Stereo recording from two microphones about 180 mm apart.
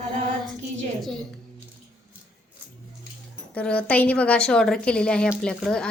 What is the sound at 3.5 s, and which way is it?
A woman's voice, 5° left (ahead or behind).